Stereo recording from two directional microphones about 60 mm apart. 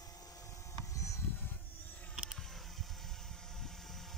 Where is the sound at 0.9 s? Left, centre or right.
Left.